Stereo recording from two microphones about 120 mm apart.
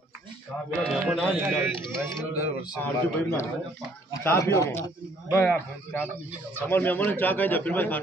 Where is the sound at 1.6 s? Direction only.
20° right (ahead or behind).